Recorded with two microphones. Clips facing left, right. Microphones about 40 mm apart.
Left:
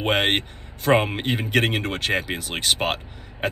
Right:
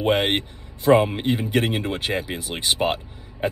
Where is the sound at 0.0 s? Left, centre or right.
Left.